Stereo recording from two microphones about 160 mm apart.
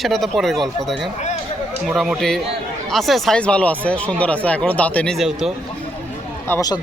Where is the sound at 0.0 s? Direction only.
Centre (ahead or behind).